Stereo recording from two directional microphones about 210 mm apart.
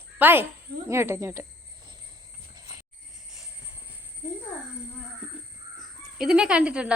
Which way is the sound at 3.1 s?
Centre (ahead or behind).